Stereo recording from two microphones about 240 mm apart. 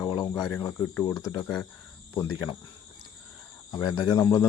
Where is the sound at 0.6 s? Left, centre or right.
Centre.